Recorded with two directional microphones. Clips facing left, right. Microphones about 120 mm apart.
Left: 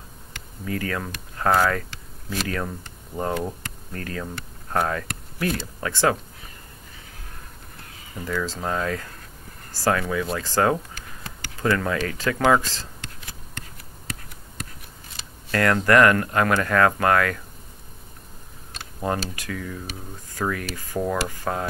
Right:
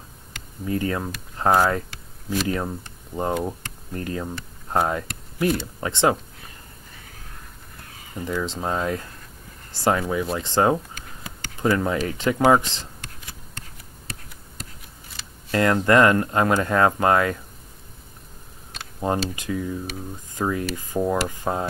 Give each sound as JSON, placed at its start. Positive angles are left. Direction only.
{"t": 0.7, "sound": "speech", "side_deg": -25}
{"t": 8.3, "sound": "speech", "side_deg": -20}
{"t": 15.5, "sound": "speech", "side_deg": -20}
{"t": 19.0, "sound": "speech", "side_deg": -20}